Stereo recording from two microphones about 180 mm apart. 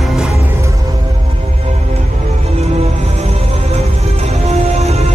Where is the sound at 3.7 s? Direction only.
35° right (ahead or behind).